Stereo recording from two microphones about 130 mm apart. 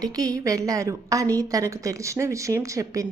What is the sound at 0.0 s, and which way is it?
A woman's voice, 30° right (ahead or behind).